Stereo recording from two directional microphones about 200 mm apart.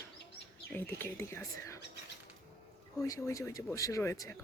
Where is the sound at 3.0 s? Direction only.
15° left (ahead or behind).